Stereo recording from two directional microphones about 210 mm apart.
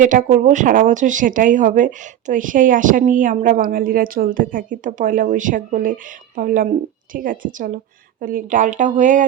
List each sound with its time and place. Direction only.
0.0 s speech: 40° right (ahead or behind)